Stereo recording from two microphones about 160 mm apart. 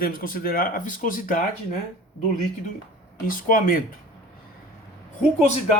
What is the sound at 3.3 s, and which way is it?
Speech, 60° left (ahead or behind).